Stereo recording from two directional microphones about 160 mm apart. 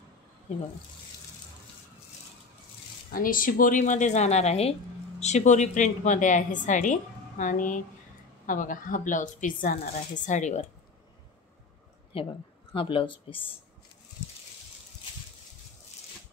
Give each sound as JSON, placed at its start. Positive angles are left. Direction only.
{"t": 3.1, "sound": "a woman's voice", "side_deg": 60}
{"t": 12.1, "sound": "speech", "side_deg": 35}